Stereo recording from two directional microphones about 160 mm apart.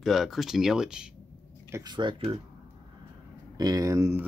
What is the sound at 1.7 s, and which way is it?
Speech, 25° right (ahead or behind).